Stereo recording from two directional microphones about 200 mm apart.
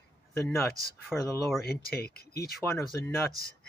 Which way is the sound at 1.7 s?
50° left (ahead or behind).